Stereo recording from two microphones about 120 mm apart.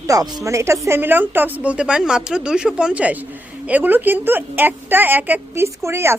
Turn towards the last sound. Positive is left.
turn(degrees=-20)  # may be behind; listen again after turning